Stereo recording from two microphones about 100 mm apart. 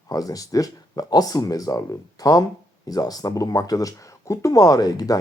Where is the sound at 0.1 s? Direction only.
40° left (ahead or behind).